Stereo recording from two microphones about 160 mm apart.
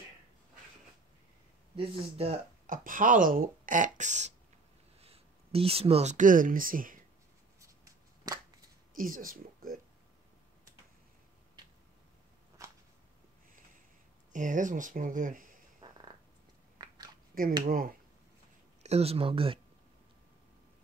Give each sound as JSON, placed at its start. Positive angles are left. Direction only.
{"t": 1.8, "sound": "speech", "side_deg": -40}
{"t": 2.6, "sound": "speech", "side_deg": -55}
{"t": 5.0, "sound": "speech", "side_deg": -35}
{"t": 7.8, "sound": "a sound", "side_deg": -20}
{"t": 8.9, "sound": "speech", "side_deg": -60}
{"t": 12.6, "sound": "a sound", "side_deg": -20}
{"t": 14.3, "sound": "speech", "side_deg": -55}
{"t": 15.8, "sound": "purr", "side_deg": -25}
{"t": 16.7, "sound": "biting", "side_deg": -25}
{"t": 17.3, "sound": "speech", "side_deg": -60}
{"t": 18.8, "sound": "speech", "side_deg": -40}